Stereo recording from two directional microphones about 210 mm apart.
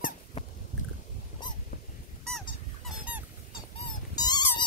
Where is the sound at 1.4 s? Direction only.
20° left (ahead or behind).